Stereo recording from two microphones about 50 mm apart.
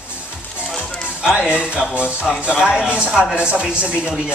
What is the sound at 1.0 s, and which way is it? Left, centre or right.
Music, centre.